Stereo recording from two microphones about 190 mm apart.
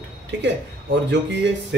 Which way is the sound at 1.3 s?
65° right (ahead or behind).